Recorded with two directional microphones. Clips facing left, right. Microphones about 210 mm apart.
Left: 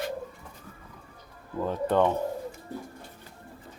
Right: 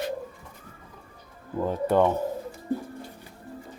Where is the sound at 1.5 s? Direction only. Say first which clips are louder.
Right 2 dB; 10° right (ahead or behind).